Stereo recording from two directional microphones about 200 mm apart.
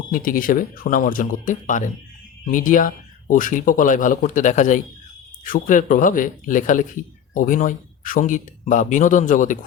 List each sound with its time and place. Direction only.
0.1 s speech: 45° left (ahead or behind)